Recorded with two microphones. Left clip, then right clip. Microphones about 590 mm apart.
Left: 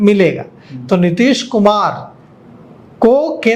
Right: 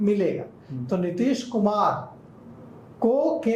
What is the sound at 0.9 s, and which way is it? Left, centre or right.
Speech, left.